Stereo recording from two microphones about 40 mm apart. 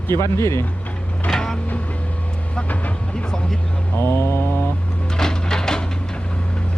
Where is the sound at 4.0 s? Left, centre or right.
Left.